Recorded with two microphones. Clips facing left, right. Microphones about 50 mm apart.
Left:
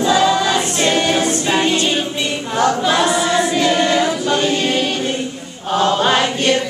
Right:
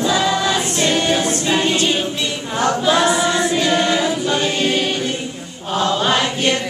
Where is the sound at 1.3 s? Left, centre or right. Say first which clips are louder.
Left 1 dB; centre.